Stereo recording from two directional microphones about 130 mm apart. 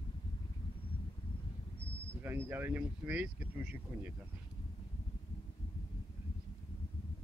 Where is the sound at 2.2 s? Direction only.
15° right (ahead or behind).